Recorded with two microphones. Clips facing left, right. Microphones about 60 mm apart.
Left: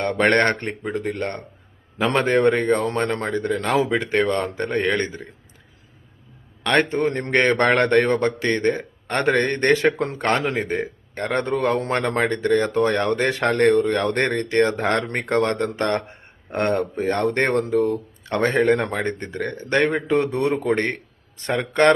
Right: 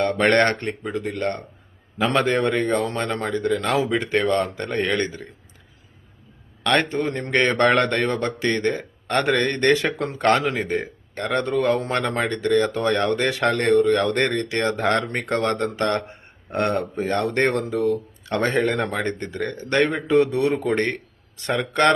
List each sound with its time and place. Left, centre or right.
0.0 s speech: left
6.6 s a man's voice: left
6.9 s speech: left